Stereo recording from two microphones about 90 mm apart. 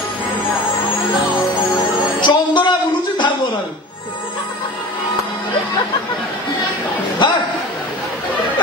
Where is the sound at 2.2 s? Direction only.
60° left (ahead or behind).